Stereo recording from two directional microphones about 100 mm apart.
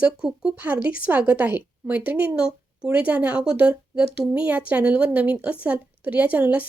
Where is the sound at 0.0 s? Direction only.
10° right (ahead or behind).